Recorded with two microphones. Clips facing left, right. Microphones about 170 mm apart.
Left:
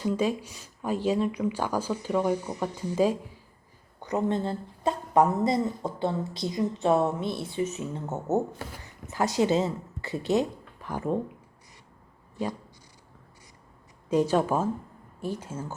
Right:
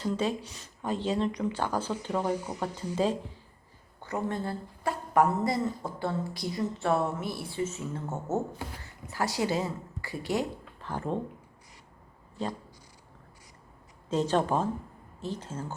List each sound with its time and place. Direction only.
0.0 s a woman's voice: 10° left (ahead or behind)
14.1 s speech: 10° left (ahead or behind)